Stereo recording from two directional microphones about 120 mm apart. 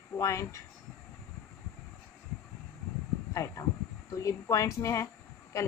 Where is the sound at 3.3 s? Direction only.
25° left (ahead or behind).